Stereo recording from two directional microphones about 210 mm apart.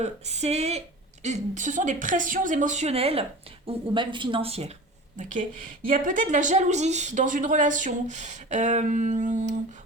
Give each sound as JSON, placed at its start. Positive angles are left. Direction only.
{"t": 0.0, "sound": "a woman's voice", "side_deg": -30}